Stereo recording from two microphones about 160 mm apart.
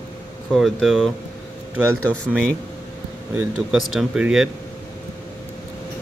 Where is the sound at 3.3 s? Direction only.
10° right (ahead or behind).